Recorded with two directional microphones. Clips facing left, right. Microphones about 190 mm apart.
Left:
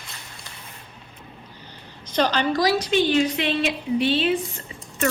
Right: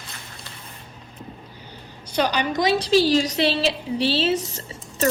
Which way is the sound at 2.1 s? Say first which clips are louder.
Left 1 dB; 10° right (ahead or behind).